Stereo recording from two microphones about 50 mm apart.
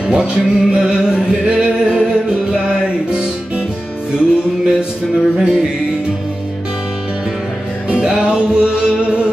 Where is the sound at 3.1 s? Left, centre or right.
Centre.